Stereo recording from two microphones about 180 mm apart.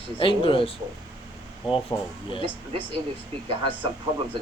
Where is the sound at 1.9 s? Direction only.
20° left (ahead or behind).